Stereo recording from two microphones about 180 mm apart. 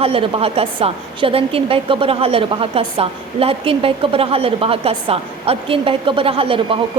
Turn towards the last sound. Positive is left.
turn(degrees=-30)  # may be behind; listen again after turning